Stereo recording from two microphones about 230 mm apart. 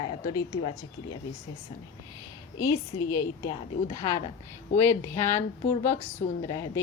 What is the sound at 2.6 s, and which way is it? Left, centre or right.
Speech, left.